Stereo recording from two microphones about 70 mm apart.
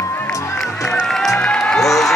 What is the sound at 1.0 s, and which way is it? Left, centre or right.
Music, centre.